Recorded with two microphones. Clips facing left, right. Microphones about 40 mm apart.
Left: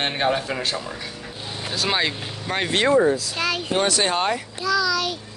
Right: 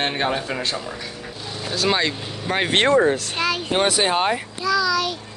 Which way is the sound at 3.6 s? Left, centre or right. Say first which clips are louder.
Right 2 dB; centre.